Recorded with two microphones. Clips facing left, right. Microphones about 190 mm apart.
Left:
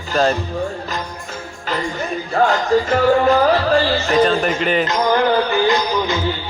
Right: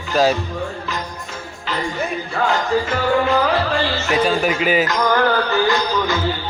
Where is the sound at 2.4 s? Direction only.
40° left (ahead or behind).